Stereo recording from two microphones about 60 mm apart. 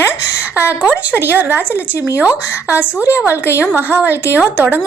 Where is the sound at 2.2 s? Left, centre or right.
Right.